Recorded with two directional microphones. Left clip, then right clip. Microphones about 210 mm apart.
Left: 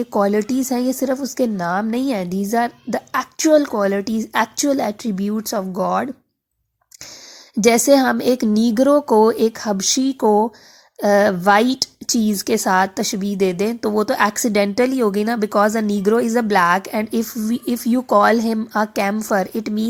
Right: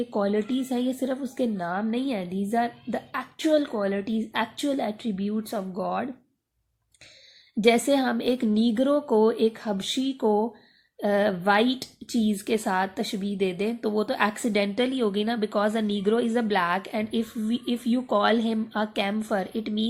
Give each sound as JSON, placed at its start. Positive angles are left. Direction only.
{"t": 0.1, "sound": "speech", "side_deg": 55}
{"t": 7.7, "sound": "speech", "side_deg": 55}